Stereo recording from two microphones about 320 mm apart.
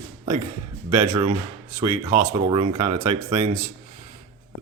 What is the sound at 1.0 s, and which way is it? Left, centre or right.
Speech, right.